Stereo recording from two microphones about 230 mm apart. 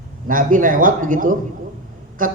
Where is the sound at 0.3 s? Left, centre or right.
Right.